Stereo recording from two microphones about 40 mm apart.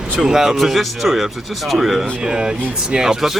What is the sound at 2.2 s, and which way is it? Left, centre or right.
Speech, centre.